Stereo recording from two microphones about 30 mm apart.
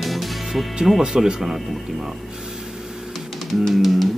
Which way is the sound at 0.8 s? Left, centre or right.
Right.